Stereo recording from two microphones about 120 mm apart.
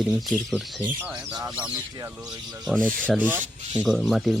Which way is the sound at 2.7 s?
10° left (ahead or behind).